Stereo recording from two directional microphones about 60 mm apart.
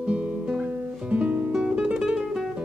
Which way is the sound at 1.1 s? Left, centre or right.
Right.